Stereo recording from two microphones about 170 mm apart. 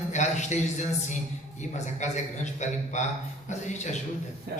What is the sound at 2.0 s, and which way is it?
A man's voice, 45° left (ahead or behind).